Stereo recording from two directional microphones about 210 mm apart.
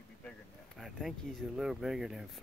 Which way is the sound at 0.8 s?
Centre (ahead or behind).